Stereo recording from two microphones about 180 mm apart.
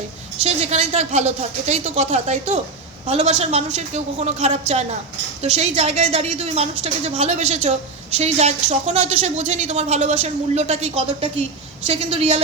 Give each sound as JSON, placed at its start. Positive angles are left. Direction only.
{"t": 0.3, "sound": "a woman's voice", "side_deg": -35}